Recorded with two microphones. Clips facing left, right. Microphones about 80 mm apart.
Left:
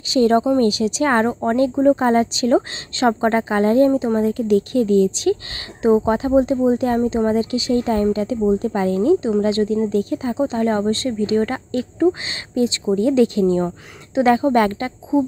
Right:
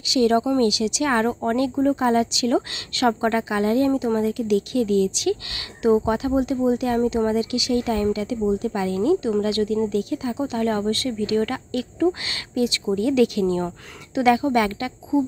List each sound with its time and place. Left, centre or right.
0.1 s speech: left